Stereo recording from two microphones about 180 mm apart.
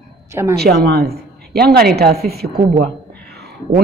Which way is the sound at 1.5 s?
60° right (ahead or behind).